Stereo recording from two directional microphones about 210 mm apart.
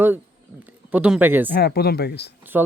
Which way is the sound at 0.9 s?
5° right (ahead or behind).